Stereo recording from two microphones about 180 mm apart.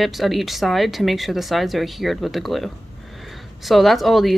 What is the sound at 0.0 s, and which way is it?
Speech, centre (ahead or behind).